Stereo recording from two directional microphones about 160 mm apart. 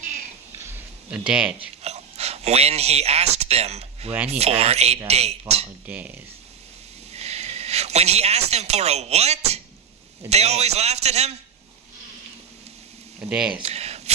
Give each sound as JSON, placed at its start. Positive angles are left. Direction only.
{"t": 0.7, "sound": "a sound", "side_deg": -5}
{"t": 1.5, "sound": "speech", "side_deg": -40}
{"t": 5.8, "sound": "speech", "side_deg": -10}
{"t": 7.1, "sound": "a man's voice", "side_deg": -40}
{"t": 13.3, "sound": "speech", "side_deg": -5}
{"t": 13.6, "sound": "a sound", "side_deg": -40}